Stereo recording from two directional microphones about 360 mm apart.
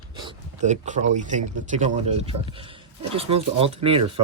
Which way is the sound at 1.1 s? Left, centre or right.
Centre.